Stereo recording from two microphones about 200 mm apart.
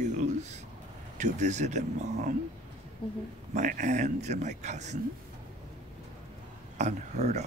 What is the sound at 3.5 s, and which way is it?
Speech, 40° right (ahead or behind).